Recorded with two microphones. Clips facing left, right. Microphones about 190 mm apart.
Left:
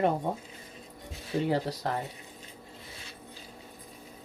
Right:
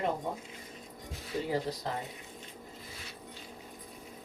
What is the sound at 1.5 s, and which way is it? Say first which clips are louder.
Speech: left 3 dB; 70° left (ahead or behind).